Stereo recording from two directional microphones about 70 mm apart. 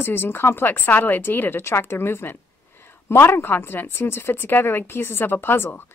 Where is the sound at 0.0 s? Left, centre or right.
Left.